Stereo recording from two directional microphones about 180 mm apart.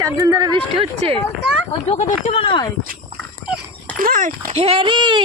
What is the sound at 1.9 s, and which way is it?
Speech, 40° left (ahead or behind).